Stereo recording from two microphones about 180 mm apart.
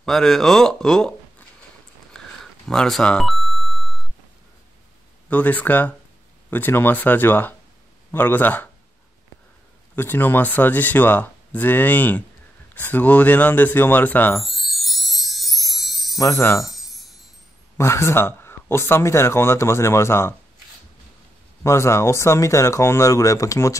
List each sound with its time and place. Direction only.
0.0 s speech: centre (ahead or behind)
2.1 s beep: 5° left (ahead or behind)
5.3 s speech: 10° left (ahead or behind)
9.9 s speech: 10° left (ahead or behind)
12.7 s a sound: 10° left (ahead or behind)
16.2 s speech: 15° left (ahead or behind)
16.6 s chime: centre (ahead or behind)
17.7 s speech: 15° left (ahead or behind)
21.6 s speech: 15° left (ahead or behind)